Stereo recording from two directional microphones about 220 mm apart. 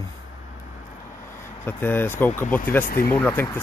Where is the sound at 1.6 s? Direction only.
10° left (ahead or behind).